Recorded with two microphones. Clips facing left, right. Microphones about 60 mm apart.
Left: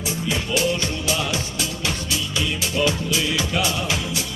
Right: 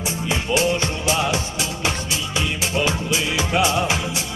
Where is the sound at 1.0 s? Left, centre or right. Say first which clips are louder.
Right 5 dB; right.